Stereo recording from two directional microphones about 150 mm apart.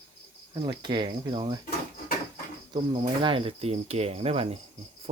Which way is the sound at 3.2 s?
35° right (ahead or behind).